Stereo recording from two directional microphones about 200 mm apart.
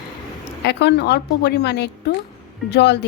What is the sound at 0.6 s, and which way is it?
A woman's voice, 60° left (ahead or behind).